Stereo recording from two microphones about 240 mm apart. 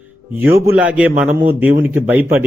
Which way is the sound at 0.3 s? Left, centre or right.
Centre.